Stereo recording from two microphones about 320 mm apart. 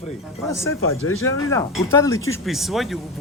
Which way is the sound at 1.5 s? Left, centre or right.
Centre.